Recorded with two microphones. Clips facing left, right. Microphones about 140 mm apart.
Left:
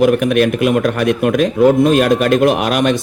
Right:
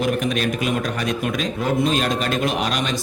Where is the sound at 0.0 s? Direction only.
55° left (ahead or behind).